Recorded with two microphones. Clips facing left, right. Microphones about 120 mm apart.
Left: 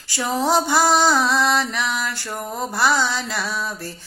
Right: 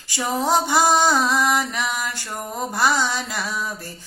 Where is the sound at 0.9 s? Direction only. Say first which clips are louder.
Left 1 dB; 15° right (ahead or behind).